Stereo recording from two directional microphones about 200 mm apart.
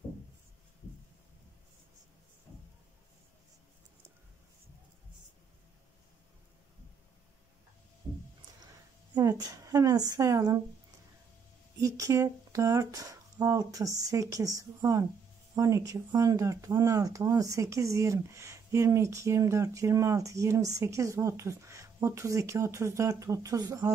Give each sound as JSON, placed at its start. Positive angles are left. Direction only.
{"t": 9.1, "sound": "a woman's voice", "side_deg": -15}
{"t": 11.8, "sound": "speech", "side_deg": -15}